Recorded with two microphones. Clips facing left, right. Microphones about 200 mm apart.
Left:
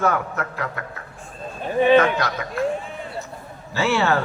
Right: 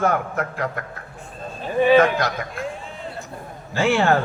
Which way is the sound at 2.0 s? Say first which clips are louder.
Right 2 dB; 50° right (ahead or behind).